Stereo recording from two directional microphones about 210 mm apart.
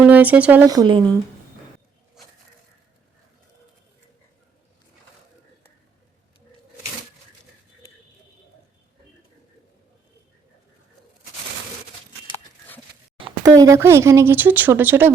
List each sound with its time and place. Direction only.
0.0 s speech: 5° right (ahead or behind)
0.7 s speech: 20° right (ahead or behind)
13.1 s speech: 15° right (ahead or behind)